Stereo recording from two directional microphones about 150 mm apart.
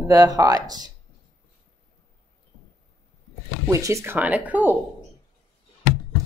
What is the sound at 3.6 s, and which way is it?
Speech, 20° right (ahead or behind).